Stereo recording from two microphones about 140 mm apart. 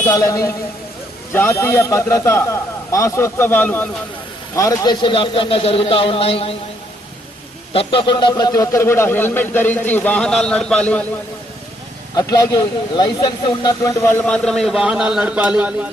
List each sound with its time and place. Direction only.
0.1 s a man's voice: 20° left (ahead or behind); by 6.6 s 45° left (ahead or behind)
7.7 s speech: 40° left (ahead or behind); by 11.0 s 10° left (ahead or behind)
12.1 s speech: 25° left (ahead or behind); by 15.9 s 10° right (ahead or behind)